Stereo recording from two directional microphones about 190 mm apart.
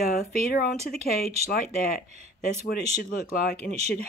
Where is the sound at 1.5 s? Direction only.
50° left (ahead or behind).